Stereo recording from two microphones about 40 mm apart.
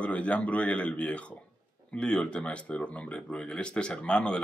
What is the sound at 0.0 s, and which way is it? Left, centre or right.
Speech, left.